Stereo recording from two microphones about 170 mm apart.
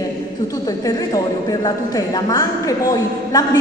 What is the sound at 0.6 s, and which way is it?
A woman's voice, 20° left (ahead or behind).